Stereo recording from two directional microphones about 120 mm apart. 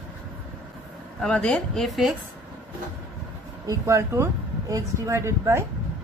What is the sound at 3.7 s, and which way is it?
A man's voice, 25° right (ahead or behind).